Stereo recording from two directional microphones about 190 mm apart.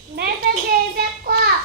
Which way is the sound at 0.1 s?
55° right (ahead or behind).